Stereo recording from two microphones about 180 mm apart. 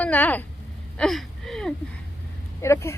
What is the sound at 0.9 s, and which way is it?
Wheeze, centre (ahead or behind).